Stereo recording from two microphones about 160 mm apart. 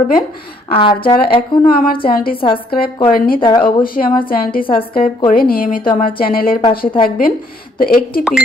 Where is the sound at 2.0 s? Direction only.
70° left (ahead or behind).